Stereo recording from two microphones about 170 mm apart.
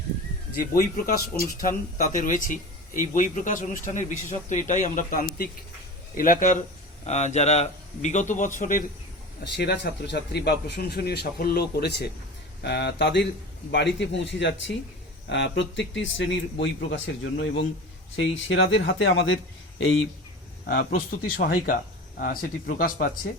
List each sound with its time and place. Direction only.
0.6 s speech: 60° left (ahead or behind)
9.4 s speech: 85° left
18.2 s speech: 90° left
21.2 s speech: 60° left (ahead or behind)